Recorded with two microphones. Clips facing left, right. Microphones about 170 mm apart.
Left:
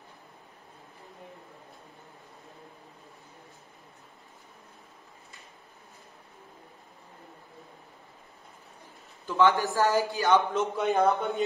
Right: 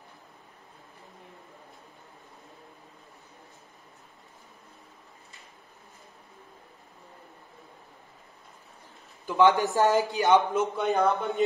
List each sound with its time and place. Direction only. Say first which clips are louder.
9.3 s a man's voice: right 2 dB; 20° right (ahead or behind)
10.4 s a man's voice: right 1 dB; centre (ahead or behind)